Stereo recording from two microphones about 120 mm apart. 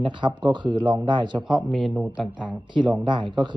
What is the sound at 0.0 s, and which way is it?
Speech, 40° right (ahead or behind).